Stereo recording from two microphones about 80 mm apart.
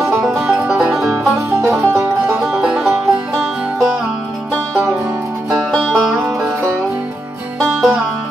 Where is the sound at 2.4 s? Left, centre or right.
Centre.